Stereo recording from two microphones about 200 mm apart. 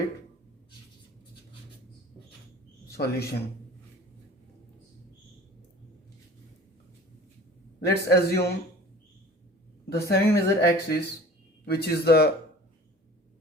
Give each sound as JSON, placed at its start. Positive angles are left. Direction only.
{"t": 2.9, "sound": "a man's voice", "side_deg": 50}
{"t": 7.9, "sound": "a man's voice", "side_deg": 55}
{"t": 9.9, "sound": "a man's voice", "side_deg": 50}